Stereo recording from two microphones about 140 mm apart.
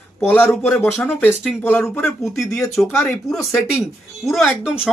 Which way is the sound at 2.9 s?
15° left (ahead or behind).